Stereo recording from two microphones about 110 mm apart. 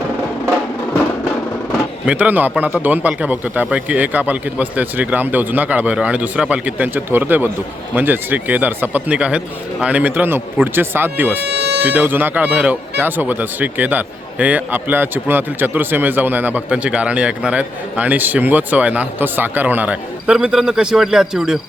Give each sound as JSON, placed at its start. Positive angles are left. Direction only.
{"t": 2.0, "sound": "speech", "side_deg": -15}